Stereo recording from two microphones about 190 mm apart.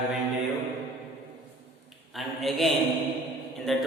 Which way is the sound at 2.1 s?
Centre (ahead or behind).